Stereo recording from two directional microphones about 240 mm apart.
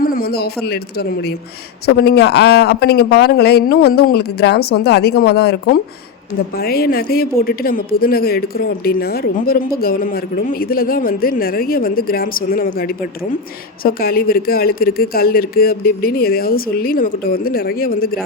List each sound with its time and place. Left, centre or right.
0.0 s a woman's voice: left